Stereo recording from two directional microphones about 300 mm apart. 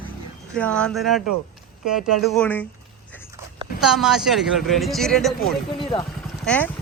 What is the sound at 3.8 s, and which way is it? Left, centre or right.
Speech, centre.